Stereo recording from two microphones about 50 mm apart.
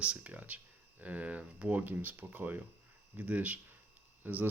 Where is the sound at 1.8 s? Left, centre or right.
Right.